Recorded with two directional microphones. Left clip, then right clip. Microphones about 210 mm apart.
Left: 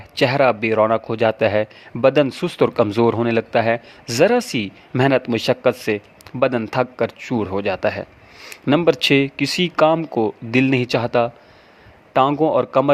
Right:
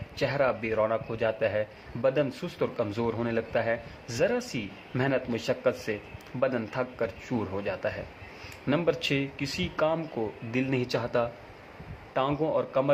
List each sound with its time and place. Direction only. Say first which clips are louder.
0.2 s a man's voice: left 11 dB; 45° left (ahead or behind)
12.3 s a man's voice: left 11 dB; 45° left (ahead or behind)